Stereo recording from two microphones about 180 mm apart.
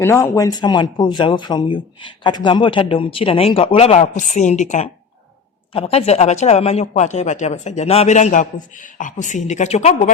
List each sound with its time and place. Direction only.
0.0 s speech: 15° left (ahead or behind); by 10.1 s 40° left (ahead or behind)